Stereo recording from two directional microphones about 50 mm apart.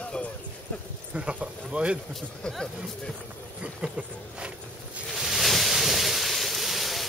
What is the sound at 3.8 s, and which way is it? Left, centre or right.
Speech, centre.